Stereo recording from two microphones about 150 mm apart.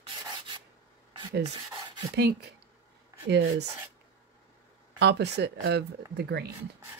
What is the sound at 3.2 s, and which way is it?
Speech, 90° right.